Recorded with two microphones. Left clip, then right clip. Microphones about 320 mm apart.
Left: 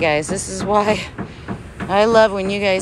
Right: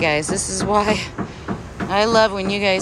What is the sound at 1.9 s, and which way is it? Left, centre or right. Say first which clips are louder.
Speech: left 3 dB; centre.